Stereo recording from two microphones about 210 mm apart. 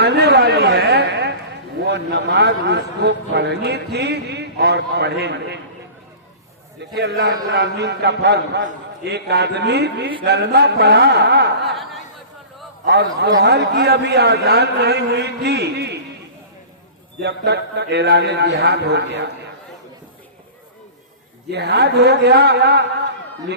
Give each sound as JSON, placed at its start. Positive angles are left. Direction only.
{"t": 0.0, "sound": "a sound", "side_deg": -50}
{"t": 1.8, "sound": "a man's voice", "side_deg": -55}
{"t": 6.9, "sound": "a man's voice", "side_deg": -55}
{"t": 11.7, "sound": "a sound", "side_deg": 0}
{"t": 12.8, "sound": "a man's voice", "side_deg": -55}
{"t": 17.2, "sound": "a man's voice", "side_deg": -55}
{"t": 21.5, "sound": "a man's voice", "side_deg": -50}